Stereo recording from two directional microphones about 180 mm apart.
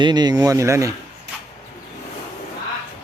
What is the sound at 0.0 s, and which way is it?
Speech, 25° right (ahead or behind).